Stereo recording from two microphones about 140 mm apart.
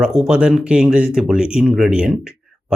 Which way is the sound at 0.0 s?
5° right (ahead or behind).